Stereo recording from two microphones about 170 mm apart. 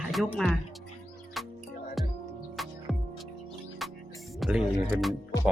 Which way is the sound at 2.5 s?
Centre (ahead or behind).